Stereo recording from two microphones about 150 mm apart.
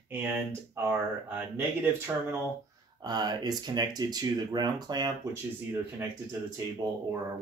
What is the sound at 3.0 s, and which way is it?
Speech, 25° right (ahead or behind).